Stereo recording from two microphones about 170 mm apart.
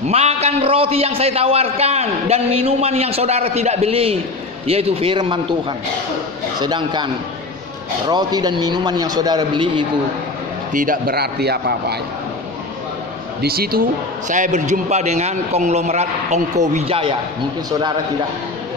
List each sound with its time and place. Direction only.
0.0 s a man's voice: 40° right (ahead or behind)
8.1 s a man's voice: 25° right (ahead or behind)
10.7 s a man's voice: 55° right (ahead or behind); by 12.0 s 70° right (ahead or behind)
13.4 s speech: 65° right (ahead or behind)
14.3 s a man's voice: 45° right (ahead or behind)
17.6 s a man's voice: 20° right (ahead or behind)